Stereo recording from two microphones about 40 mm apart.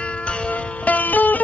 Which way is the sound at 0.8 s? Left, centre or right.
Left.